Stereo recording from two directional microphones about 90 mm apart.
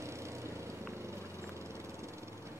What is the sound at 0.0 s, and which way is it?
Vehicle, 30° right (ahead or behind).